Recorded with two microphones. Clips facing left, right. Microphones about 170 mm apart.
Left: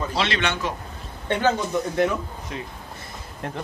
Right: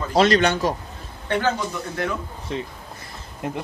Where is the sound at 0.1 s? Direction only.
40° right (ahead or behind).